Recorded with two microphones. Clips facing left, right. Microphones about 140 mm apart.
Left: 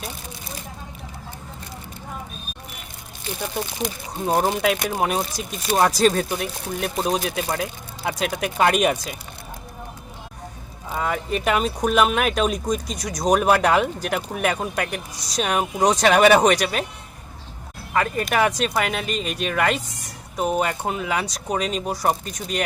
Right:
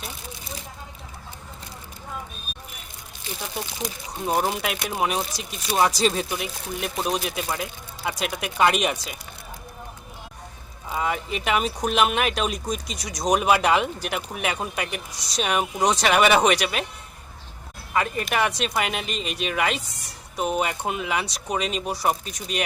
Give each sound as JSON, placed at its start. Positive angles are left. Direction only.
{"t": 4.3, "sound": "speech", "side_deg": 40}
{"t": 10.9, "sound": "speech", "side_deg": 45}
{"t": 17.9, "sound": "speech", "side_deg": 45}